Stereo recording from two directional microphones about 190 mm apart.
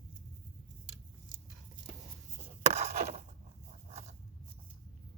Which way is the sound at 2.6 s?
35° right (ahead or behind).